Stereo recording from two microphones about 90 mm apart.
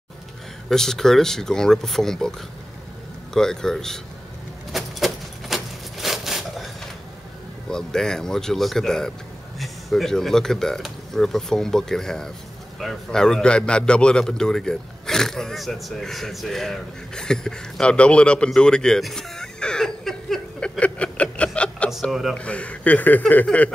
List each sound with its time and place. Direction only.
0.7 s speech: 5° left (ahead or behind)
3.3 s speech: 5° left (ahead or behind)
4.7 s a sound: centre (ahead or behind)
7.7 s a man's voice: 5° left (ahead or behind)
22.1 s speech: centre (ahead or behind)
22.4 s speech: 15° left (ahead or behind)